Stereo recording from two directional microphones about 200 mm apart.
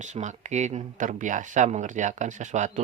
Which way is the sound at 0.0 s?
35° right (ahead or behind).